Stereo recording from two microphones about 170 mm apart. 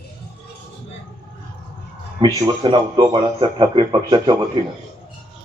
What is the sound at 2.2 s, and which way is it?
A man's voice, 20° right (ahead or behind).